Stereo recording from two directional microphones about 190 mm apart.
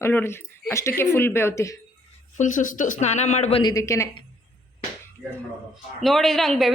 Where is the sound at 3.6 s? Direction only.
20° left (ahead or behind).